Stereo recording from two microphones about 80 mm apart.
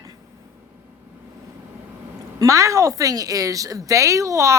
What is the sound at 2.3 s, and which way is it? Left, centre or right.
Speech, right.